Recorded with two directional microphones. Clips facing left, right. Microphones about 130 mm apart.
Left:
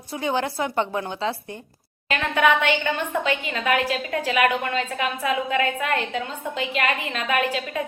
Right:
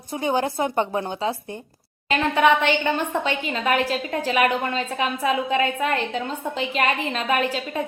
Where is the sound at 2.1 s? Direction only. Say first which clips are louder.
Right 2 dB; 35° right (ahead or behind).